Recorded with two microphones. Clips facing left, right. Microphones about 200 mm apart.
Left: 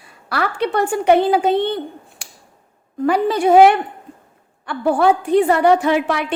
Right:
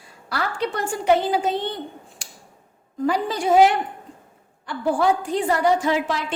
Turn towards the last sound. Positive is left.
turn(degrees=65)  # may be behind; listen again after turning